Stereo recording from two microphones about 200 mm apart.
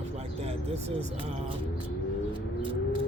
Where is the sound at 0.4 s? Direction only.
30° right (ahead or behind).